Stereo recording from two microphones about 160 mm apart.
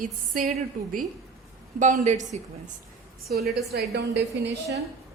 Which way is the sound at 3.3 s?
75° right (ahead or behind).